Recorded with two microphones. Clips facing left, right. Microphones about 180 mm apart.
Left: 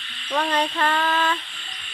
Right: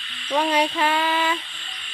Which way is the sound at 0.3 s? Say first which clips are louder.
Right 2 dB; 10° right (ahead or behind).